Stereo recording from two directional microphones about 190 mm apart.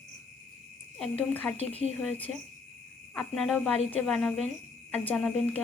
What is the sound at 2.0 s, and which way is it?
A woman's voice, 5° left (ahead or behind).